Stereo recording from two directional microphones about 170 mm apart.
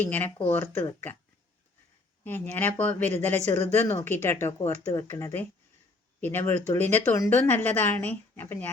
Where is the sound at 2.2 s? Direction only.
10° left (ahead or behind).